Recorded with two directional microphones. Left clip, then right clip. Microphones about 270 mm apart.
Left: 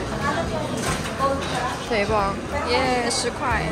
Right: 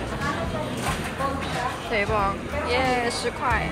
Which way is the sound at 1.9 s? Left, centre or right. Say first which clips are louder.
Left 2 dB; centre.